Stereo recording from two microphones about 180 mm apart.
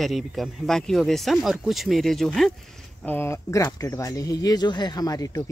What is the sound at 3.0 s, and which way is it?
Speech, 10° left (ahead or behind).